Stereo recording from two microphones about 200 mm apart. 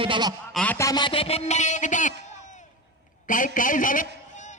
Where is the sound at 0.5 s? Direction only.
5° left (ahead or behind).